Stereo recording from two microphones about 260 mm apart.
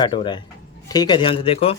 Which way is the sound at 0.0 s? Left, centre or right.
Centre.